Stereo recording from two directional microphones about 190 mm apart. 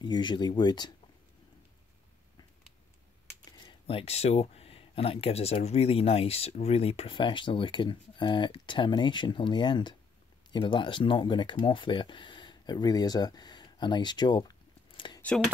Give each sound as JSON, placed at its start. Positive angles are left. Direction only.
{"t": 0.0, "sound": "speech", "side_deg": 25}
{"t": 3.5, "sound": "speech", "side_deg": 25}
{"t": 15.2, "sound": "speech", "side_deg": 5}